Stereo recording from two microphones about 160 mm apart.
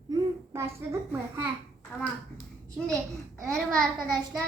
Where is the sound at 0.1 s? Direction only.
15° right (ahead or behind).